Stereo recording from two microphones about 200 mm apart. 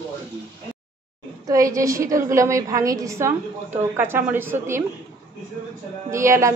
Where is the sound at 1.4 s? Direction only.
15° right (ahead or behind).